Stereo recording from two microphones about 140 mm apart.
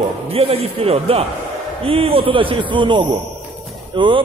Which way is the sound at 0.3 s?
45° right (ahead or behind).